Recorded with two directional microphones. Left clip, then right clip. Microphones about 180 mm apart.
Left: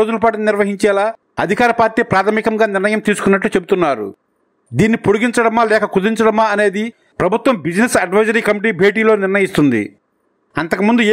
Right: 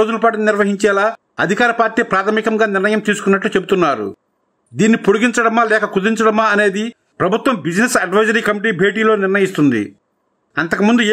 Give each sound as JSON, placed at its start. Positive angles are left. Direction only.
{"t": 0.0, "sound": "a man's voice", "side_deg": 30}